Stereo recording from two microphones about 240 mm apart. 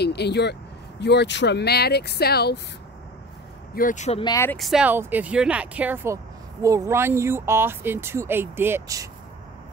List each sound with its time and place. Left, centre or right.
0.0 s speech: left
3.7 s speech: left
4.2 s speech: centre
4.6 s speech: centre